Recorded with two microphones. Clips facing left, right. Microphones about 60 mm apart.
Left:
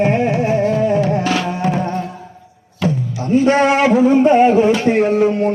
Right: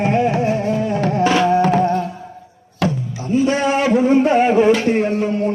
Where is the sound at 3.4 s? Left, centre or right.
Left.